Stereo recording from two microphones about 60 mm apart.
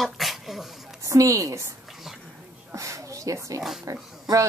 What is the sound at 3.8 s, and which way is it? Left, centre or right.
Speech, right.